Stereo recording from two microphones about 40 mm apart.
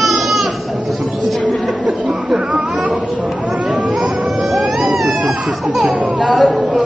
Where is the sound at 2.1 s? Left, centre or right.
Right.